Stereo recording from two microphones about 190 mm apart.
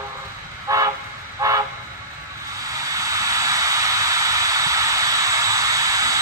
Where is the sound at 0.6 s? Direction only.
20° right (ahead or behind).